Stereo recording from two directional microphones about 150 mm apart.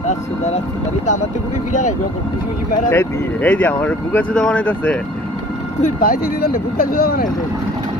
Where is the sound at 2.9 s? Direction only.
15° left (ahead or behind).